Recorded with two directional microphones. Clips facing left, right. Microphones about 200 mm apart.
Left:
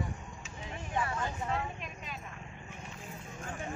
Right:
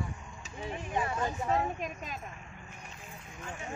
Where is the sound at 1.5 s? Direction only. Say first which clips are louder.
Right 6 dB; 45° right (ahead or behind).